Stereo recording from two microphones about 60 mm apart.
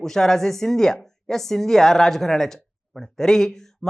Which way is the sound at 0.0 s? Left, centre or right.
Centre.